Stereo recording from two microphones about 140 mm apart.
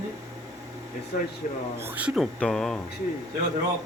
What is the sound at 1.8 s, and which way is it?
Speech, 10° right (ahead or behind).